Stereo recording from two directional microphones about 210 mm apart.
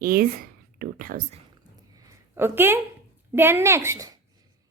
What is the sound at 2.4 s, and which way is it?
A woman's voice, 10° right (ahead or behind).